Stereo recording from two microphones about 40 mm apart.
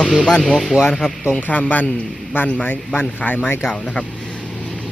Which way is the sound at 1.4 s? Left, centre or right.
Left.